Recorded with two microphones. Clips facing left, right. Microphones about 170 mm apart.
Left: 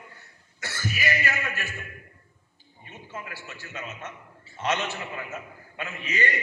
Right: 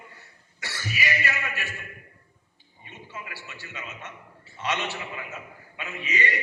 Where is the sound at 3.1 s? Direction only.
50° left (ahead or behind).